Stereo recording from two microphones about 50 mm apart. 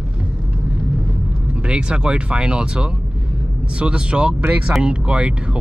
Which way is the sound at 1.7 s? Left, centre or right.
Centre.